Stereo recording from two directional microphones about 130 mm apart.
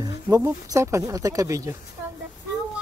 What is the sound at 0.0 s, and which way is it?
Speech, 25° right (ahead or behind).